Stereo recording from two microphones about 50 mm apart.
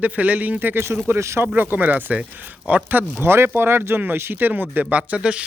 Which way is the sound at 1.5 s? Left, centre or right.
Right.